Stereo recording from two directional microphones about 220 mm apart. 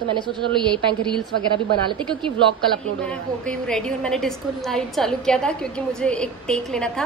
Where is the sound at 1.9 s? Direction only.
20° right (ahead or behind).